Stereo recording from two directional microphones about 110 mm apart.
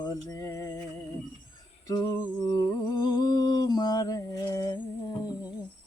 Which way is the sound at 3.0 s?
40° left (ahead or behind).